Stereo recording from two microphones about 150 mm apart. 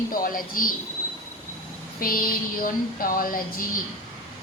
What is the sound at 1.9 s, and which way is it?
A woman's voice, 70° left (ahead or behind).